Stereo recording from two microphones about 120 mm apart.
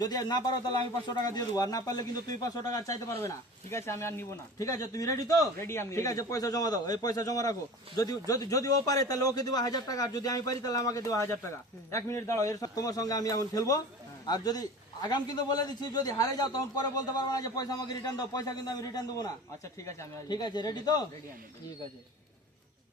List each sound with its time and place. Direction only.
0.0 s a man's voice: 35° left (ahead or behind)
3.1 s a man's voice: 20° left (ahead or behind)
20.3 s a man's voice: 35° left (ahead or behind)